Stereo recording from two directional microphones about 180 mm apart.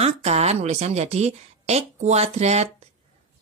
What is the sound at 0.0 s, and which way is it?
Speech, 35° right (ahead or behind).